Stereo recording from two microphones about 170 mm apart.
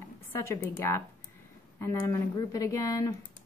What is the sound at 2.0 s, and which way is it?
Speech, 20° left (ahead or behind).